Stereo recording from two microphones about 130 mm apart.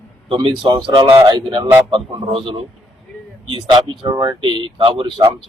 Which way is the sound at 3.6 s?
35° right (ahead or behind).